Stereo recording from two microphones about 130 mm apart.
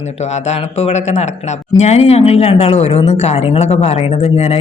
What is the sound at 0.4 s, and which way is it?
Speech, 55° left (ahead or behind).